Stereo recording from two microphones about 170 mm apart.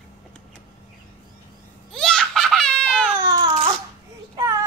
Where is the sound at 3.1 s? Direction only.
20° right (ahead or behind).